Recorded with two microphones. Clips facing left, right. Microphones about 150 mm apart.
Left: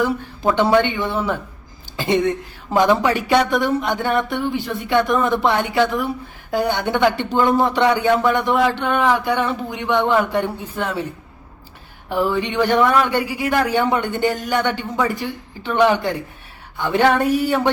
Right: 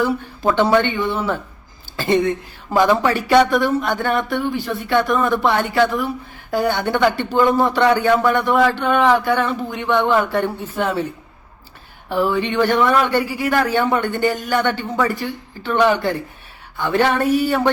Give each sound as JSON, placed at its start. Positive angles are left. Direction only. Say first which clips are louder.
{"t": 0.0, "sound": "a man's voice", "louder": "right 1 dB", "side_deg": 15}
{"t": 2.0, "sound": "a sound", "louder": "right 1 dB", "side_deg": 20}
{"t": 2.7, "sound": "a man's voice", "louder": "even", "side_deg": 15}
{"t": 12.0, "sound": "a man's voice", "louder": "right 1 dB", "side_deg": 15}